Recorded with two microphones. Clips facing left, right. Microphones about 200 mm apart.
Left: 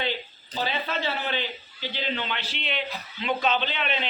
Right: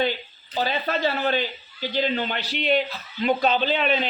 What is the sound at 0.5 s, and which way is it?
A man's voice, 40° right (ahead or behind).